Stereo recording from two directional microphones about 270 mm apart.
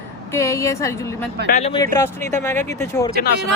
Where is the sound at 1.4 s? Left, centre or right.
Left; by 2.6 s centre.